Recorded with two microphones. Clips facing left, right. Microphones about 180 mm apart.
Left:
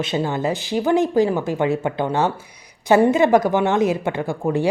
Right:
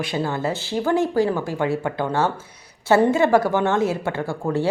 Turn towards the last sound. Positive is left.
turn(degrees=15)  # may be behind; listen again after turning